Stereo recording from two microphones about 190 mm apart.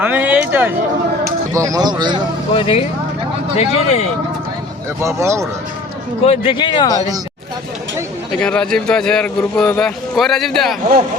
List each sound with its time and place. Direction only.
0.0 s speech: 10° right (ahead or behind)
2.6 s speech: 30° left (ahead or behind)
4.9 s speech: 15° right (ahead or behind)
6.2 s speech: 30° left (ahead or behind)
8.4 s speech: 5° left (ahead or behind)